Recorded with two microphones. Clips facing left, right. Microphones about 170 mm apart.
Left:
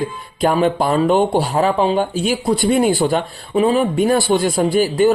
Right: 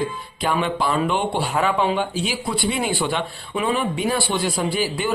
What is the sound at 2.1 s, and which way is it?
Speech, 50° left (ahead or behind).